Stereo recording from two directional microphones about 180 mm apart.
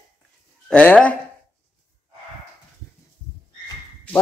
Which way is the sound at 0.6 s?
5° left (ahead or behind).